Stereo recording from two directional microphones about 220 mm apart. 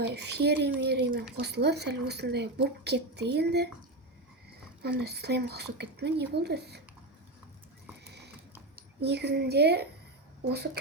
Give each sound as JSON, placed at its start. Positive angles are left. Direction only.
{"t": 0.1, "sound": "speech", "side_deg": -50}
{"t": 4.8, "sound": "speech", "side_deg": -45}
{"t": 8.0, "sound": "horse", "side_deg": -50}
{"t": 9.0, "sound": "speech", "side_deg": -50}